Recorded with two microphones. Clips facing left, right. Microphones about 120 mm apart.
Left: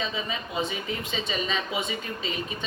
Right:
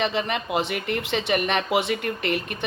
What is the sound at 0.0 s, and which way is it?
Speech, 75° right (ahead or behind).